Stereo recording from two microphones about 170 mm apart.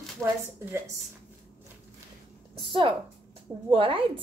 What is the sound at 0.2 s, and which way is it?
Speech, 20° right (ahead or behind).